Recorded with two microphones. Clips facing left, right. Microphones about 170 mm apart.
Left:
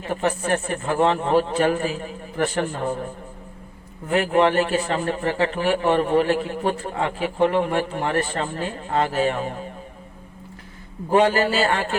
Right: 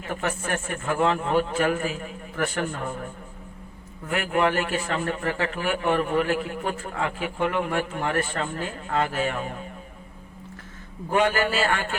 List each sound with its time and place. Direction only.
0.0 s a man's voice: 30° left (ahead or behind)
4.1 s a man's voice: 30° left (ahead or behind)
11.1 s a man's voice: 30° left (ahead or behind)